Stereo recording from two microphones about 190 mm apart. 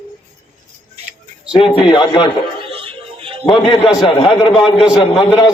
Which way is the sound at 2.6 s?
30° right (ahead or behind).